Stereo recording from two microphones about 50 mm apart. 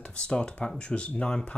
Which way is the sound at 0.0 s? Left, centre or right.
Centre.